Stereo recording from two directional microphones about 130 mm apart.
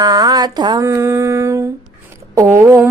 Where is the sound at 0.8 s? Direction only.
20° right (ahead or behind).